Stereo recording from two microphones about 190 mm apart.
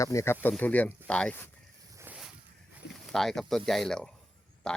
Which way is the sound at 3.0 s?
Centre (ahead or behind).